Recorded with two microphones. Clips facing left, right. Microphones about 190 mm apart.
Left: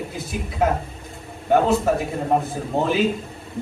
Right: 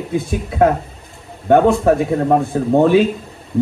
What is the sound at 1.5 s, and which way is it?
Speech, 60° right (ahead or behind).